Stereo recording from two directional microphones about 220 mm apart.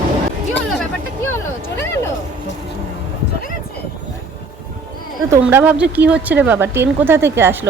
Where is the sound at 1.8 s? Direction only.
10° left (ahead or behind).